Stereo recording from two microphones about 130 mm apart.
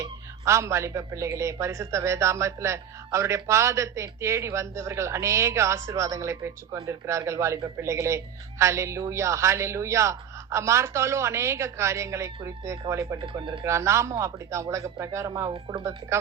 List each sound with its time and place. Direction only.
0.0 s speech: 20° right (ahead or behind)
13.2 s speech: 40° right (ahead or behind)
13.7 s speech: 20° right (ahead or behind)
15.5 s speech: 40° right (ahead or behind)
15.8 s speech: 25° right (ahead or behind)